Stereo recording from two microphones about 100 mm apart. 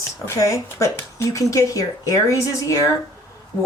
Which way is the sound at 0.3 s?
35° left (ahead or behind).